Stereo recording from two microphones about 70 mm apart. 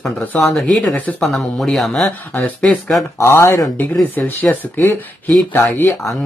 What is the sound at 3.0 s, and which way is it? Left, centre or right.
Speech, left.